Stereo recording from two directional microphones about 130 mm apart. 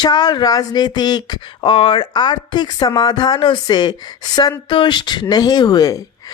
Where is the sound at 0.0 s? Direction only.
35° left (ahead or behind).